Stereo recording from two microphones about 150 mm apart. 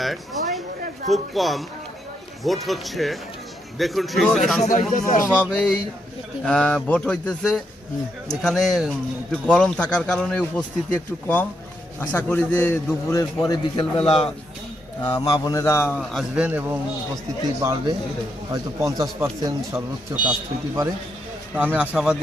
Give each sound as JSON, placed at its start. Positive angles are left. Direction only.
{"t": 0.0, "sound": "a sound", "side_deg": 0}
{"t": 1.1, "sound": "speech", "side_deg": 0}
{"t": 4.6, "sound": "speech", "side_deg": 55}
{"t": 5.3, "sound": "a man's voice", "side_deg": 10}
{"t": 13.9, "sound": "a man's voice", "side_deg": 40}
{"t": 15.2, "sound": "a man's voice", "side_deg": 25}
{"t": 16.0, "sound": "a man's voice", "side_deg": 0}
{"t": 17.6, "sound": "a man's voice", "side_deg": -25}
{"t": 21.5, "sound": "a man's voice", "side_deg": -10}